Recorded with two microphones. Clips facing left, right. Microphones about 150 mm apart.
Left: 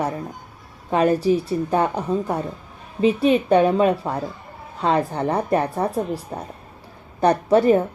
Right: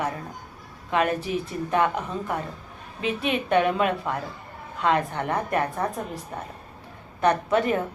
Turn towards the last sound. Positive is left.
turn(degrees=35)  # may be behind; listen again after turning